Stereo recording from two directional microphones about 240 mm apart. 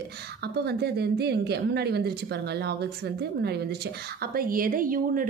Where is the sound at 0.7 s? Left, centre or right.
Right.